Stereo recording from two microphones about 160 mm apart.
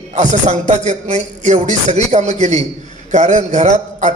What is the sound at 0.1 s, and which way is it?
A man's voice, 45° right (ahead or behind).